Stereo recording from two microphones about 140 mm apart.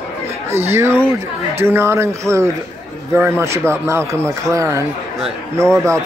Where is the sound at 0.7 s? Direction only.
20° right (ahead or behind).